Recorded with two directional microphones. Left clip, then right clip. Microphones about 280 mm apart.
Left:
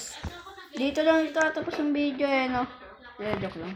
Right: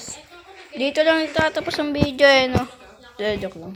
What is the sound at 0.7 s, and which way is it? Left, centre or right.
Speech, centre.